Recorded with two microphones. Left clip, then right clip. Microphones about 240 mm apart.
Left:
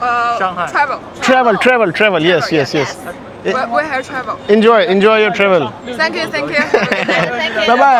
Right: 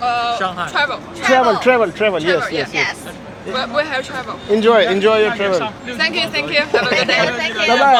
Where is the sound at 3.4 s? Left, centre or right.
Left.